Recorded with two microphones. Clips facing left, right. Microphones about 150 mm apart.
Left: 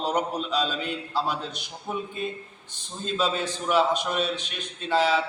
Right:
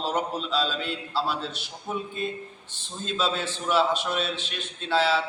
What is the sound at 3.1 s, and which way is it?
A man's voice, 15° left (ahead or behind).